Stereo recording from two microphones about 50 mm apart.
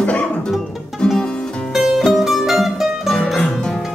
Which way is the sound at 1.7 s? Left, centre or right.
Centre.